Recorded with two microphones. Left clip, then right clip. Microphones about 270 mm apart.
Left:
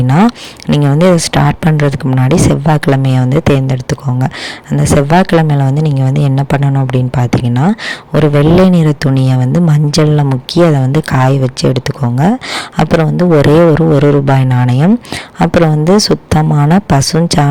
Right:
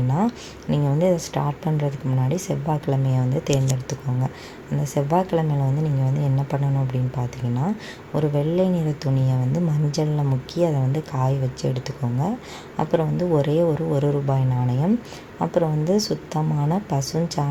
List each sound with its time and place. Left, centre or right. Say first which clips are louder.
0.1 s speech: left 14 dB; left